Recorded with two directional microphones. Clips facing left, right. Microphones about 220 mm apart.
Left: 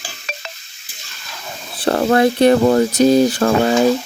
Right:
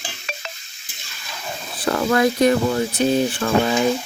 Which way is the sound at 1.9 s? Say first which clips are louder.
Left 4 dB; 40° left (ahead or behind).